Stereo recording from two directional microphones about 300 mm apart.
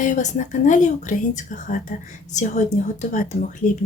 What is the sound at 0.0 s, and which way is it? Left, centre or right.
A woman's voice, left.